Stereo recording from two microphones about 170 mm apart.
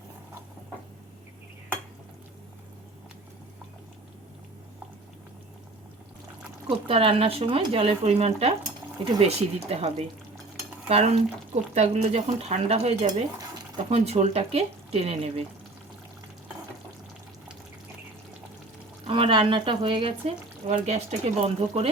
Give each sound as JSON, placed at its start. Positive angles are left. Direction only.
{"t": 6.7, "sound": "speech", "side_deg": -30}
{"t": 10.8, "sound": "stir", "side_deg": -35}
{"t": 11.5, "sound": "speech", "side_deg": -40}
{"t": 19.0, "sound": "speech", "side_deg": -30}